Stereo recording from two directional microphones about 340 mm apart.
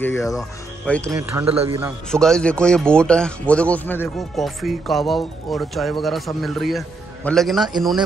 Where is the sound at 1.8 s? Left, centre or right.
Centre.